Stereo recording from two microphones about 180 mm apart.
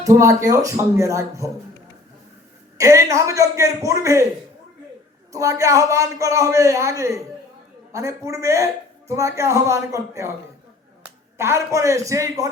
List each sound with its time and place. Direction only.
0.0 s a man's voice: 15° right (ahead or behind)
2.7 s a man's voice: 15° right (ahead or behind)
5.3 s a man's voice: 20° right (ahead or behind)
11.3 s a man's voice: 15° right (ahead or behind)